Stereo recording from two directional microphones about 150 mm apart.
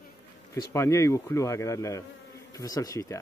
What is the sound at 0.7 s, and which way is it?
Speech, 20° left (ahead or behind).